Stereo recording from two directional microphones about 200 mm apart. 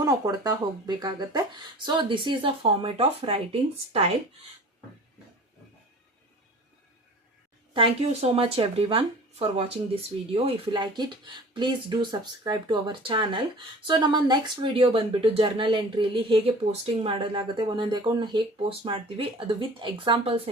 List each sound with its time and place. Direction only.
0.0 s speech: 20° right (ahead or behind)
7.7 s speech: 25° right (ahead or behind)